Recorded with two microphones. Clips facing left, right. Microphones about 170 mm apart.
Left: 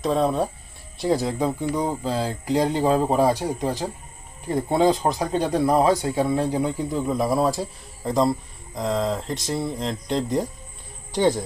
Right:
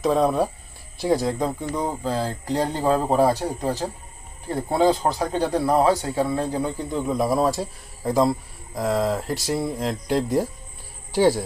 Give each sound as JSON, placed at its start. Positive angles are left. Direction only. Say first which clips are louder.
{"t": 0.0, "sound": "speech", "louder": "right 2 dB", "side_deg": 0}
{"t": 4.5, "sound": "speech", "louder": "even", "side_deg": 20}